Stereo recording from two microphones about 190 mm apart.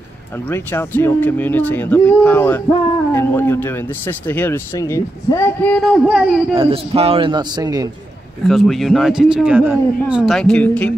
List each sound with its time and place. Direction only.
0.5 s speech: 10° left (ahead or behind); by 6.4 s 5° right (ahead or behind)
6.5 s a man's voice: 30° right (ahead or behind)
8.5 s a man's voice: centre (ahead or behind)